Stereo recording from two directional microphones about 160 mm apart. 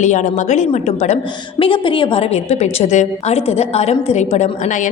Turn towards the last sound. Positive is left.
turn(degrees=50)  # may be behind; listen again after turning